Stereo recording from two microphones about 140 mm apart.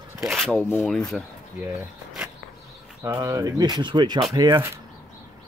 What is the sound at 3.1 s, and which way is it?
Speech, 20° right (ahead or behind).